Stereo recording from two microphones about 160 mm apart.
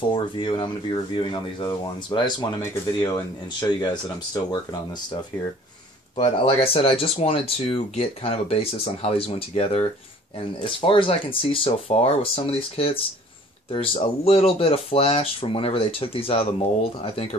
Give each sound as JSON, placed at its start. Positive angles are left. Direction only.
{"t": 0.1, "sound": "speech", "side_deg": 30}
{"t": 3.6, "sound": "speech", "side_deg": 25}
{"t": 6.1, "sound": "speech", "side_deg": 35}